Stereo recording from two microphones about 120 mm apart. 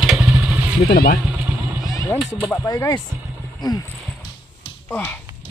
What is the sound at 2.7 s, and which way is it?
Speech, 30° left (ahead or behind).